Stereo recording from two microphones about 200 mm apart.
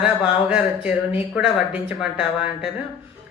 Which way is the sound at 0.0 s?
5° right (ahead or behind).